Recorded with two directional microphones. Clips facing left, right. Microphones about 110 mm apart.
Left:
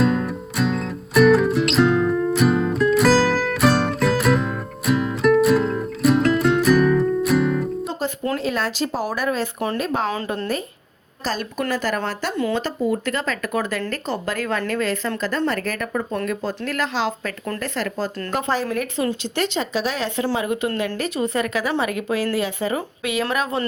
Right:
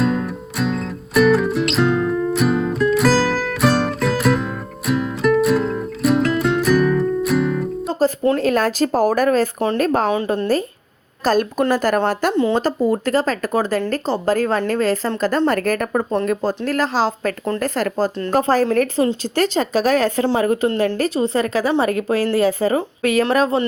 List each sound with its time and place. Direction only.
0.0 s music: centre (ahead or behind)
7.9 s music: 35° right (ahead or behind)
8.4 s speech: 45° right (ahead or behind)
10.2 s a woman's voice: 35° right (ahead or behind)
11.2 s a woman's voice: 50° right (ahead or behind); by 17.6 s 30° right (ahead or behind)
17.6 s a woman's voice: 45° right (ahead or behind)